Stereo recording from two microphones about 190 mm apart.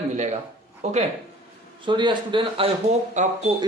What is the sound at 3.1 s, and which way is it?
Speech, 40° right (ahead or behind).